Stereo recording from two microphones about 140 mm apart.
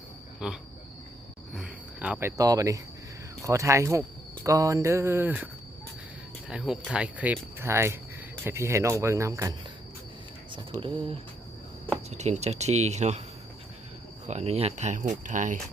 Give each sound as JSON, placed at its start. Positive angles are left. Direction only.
{"t": 0.3, "sound": "cricket", "side_deg": -5}
{"t": 3.4, "sound": "speech", "side_deg": -20}
{"t": 6.5, "sound": "speech", "side_deg": -5}
{"t": 10.5, "sound": "speech", "side_deg": -35}
{"t": 12.1, "sound": "speech", "side_deg": -50}
{"t": 14.3, "sound": "speech", "side_deg": -50}